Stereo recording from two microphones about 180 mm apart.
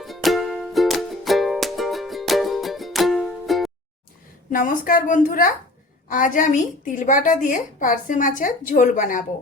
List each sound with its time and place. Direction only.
0.0 s music: centre (ahead or behind)
4.5 s a woman's voice: 50° left (ahead or behind)